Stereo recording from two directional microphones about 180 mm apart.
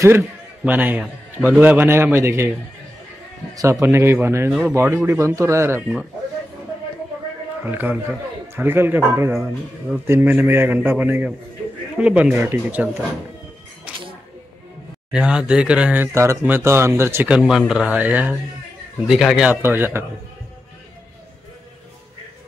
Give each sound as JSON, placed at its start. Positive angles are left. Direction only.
{"t": 0.0, "sound": "speech", "side_deg": -15}
{"t": 3.8, "sound": "speech", "side_deg": -15}
{"t": 7.6, "sound": "speech", "side_deg": -10}
{"t": 13.9, "sound": "music", "side_deg": -5}
{"t": 15.1, "sound": "speech", "side_deg": -5}